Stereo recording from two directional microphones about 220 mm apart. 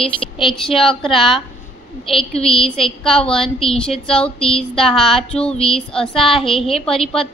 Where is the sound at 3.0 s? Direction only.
5° left (ahead or behind).